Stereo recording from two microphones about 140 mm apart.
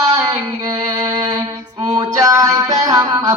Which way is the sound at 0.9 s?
25° right (ahead or behind).